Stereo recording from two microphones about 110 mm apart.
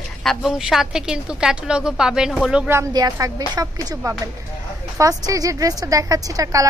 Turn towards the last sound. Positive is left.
turn(degrees=-30)  # may be behind; listen again after turning